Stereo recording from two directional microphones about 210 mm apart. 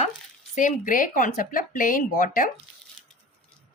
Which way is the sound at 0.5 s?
40° left (ahead or behind).